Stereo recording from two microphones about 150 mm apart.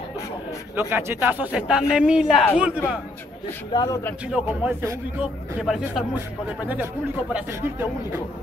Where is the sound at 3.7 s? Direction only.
30° left (ahead or behind).